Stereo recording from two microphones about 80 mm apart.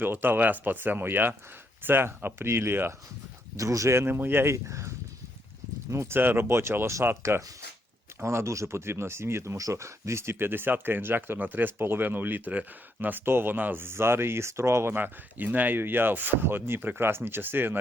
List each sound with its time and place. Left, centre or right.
0.0 s speech: right
3.6 s speech: right
5.9 s speech: right